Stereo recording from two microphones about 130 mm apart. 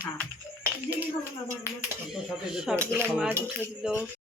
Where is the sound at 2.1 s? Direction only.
5° right (ahead or behind).